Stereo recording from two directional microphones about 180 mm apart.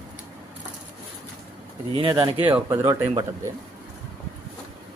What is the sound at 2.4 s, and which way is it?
Speech, 10° right (ahead or behind).